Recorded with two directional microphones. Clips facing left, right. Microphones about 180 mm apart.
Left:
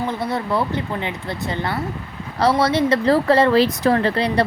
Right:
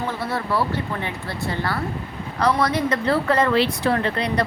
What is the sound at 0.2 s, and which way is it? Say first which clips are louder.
Speech: left 2 dB; 20° left (ahead or behind).